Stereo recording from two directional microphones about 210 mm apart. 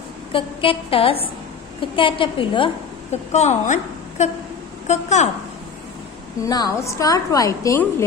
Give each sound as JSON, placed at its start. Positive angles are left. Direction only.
{"t": 0.3, "sound": "a woman's voice", "side_deg": 25}
{"t": 6.4, "sound": "a woman's voice", "side_deg": 15}